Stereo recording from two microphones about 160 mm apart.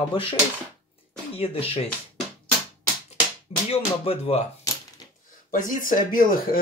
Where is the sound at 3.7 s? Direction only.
40° left (ahead or behind).